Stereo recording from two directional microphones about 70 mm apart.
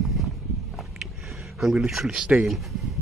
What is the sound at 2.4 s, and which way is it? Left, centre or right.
Speech, centre.